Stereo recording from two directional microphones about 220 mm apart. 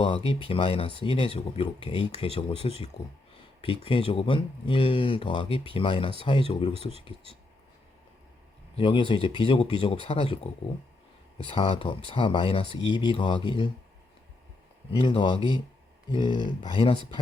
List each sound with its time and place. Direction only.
0.0 s speech: 25° left (ahead or behind)
8.7 s speech: 25° left (ahead or behind)
14.8 s speech: 25° left (ahead or behind)